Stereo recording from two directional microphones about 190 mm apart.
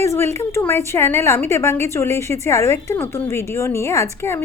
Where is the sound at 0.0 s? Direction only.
15° left (ahead or behind).